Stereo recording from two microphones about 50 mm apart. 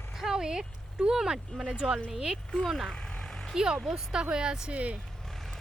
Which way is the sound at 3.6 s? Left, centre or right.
Centre.